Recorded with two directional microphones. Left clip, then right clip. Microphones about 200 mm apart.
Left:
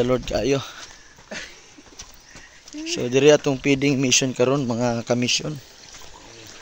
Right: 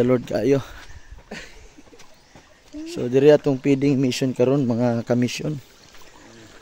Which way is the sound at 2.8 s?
25° right (ahead or behind).